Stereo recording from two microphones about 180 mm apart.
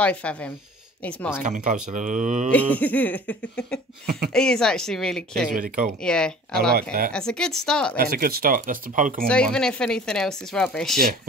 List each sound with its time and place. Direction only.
0.0 s music: 5° left (ahead or behind)
1.4 s speech: 45° right (ahead or behind)
2.5 s music: 10° left (ahead or behind)
4.3 s speech: 5° left (ahead or behind)
6.5 s speech: 60° right (ahead or behind)
7.1 s speech: 5° left (ahead or behind)
8.0 s speech: 55° right (ahead or behind)
9.3 s speech: 5° left (ahead or behind)